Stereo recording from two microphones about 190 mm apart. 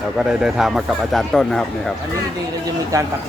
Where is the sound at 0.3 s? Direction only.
5° right (ahead or behind).